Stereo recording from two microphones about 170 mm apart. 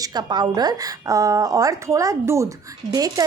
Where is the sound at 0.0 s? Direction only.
25° right (ahead or behind).